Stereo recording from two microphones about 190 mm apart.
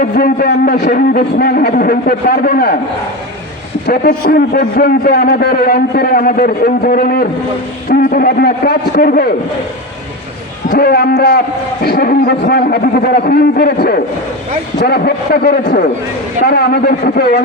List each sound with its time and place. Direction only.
0.0 s a man's voice: 50° left (ahead or behind)
3.8 s a man's voice: 55° left (ahead or behind)
10.7 s a man's voice: 55° left (ahead or behind)